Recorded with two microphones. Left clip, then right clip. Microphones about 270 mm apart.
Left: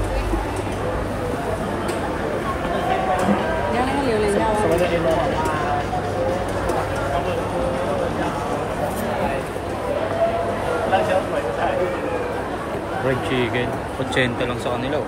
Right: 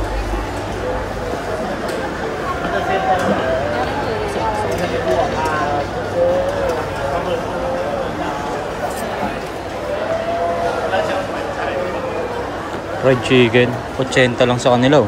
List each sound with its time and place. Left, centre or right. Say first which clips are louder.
13.3 s a man's voice: right 9 dB; centre
14.6 s a man's voice: right 10 dB; right